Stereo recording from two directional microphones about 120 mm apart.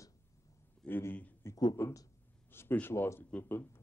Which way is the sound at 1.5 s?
35° left (ahead or behind).